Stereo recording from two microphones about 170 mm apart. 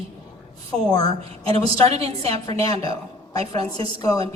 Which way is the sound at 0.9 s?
25° left (ahead or behind).